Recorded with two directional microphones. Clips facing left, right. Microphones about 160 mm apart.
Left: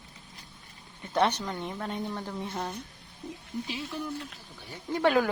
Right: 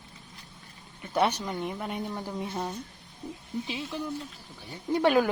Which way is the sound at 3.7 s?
25° right (ahead or behind).